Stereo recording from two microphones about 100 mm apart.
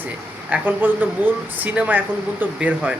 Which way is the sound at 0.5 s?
20° right (ahead or behind).